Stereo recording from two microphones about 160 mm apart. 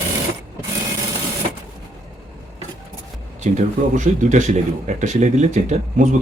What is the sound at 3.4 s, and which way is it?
Speech, 50° right (ahead or behind).